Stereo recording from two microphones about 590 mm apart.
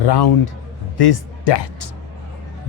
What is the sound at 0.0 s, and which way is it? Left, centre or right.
Speech, left.